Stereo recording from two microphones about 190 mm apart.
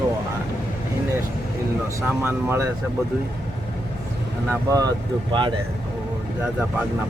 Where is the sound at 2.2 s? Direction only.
15° right (ahead or behind).